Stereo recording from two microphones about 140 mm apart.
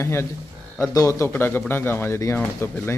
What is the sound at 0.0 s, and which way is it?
A man's voice, 20° left (ahead or behind).